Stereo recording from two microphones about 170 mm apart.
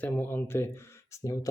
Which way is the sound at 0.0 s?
10° left (ahead or behind).